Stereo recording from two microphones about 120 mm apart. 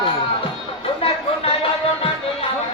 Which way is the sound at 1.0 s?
50° left (ahead or behind).